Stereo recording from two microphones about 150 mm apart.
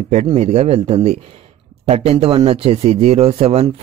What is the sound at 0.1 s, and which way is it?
Speech, 45° right (ahead or behind).